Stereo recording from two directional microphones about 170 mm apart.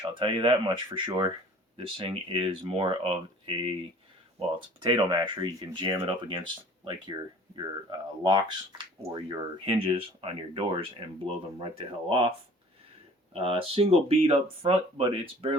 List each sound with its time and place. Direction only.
0.0 s speech: 30° right (ahead or behind)
13.3 s speech: 35° right (ahead or behind)